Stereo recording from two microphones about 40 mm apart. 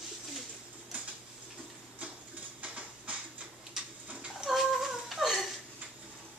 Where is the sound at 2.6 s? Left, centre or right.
Right.